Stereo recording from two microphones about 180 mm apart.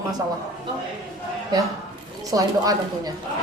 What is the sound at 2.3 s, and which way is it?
Speech, 20° right (ahead or behind).